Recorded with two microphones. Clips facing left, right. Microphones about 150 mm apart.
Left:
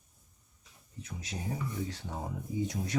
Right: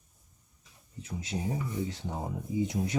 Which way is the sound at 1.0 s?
25° right (ahead or behind).